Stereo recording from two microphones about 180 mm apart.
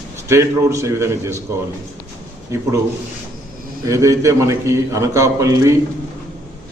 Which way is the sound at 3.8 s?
15° right (ahead or behind).